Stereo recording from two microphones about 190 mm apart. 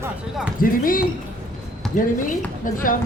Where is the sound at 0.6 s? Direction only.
50° left (ahead or behind).